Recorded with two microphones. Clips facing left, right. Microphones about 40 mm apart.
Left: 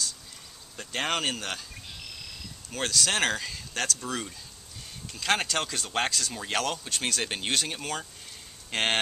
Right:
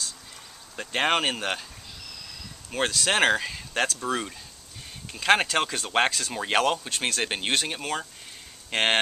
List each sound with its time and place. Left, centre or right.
0.7 s speech: right
2.7 s speech: centre